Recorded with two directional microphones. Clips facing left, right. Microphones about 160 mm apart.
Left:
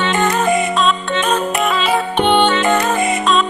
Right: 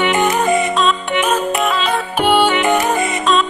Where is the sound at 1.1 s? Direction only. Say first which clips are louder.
Right 1 dB; 10° right (ahead or behind).